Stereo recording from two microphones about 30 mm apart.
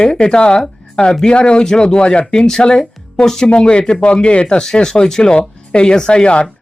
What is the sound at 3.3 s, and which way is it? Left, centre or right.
Speech, centre.